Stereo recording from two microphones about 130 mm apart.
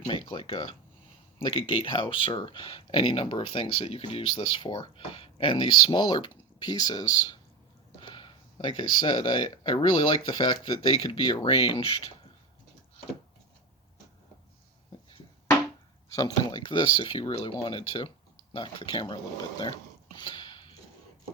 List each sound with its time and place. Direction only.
0.1 s speech: 40° left (ahead or behind)
16.1 s speech: 30° left (ahead or behind)
20.1 s a sound: 35° left (ahead or behind)